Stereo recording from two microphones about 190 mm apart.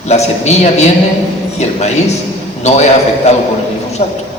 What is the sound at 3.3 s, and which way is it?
Speech, 35° left (ahead or behind).